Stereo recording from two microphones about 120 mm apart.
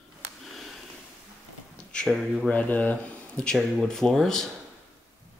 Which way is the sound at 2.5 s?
10° left (ahead or behind).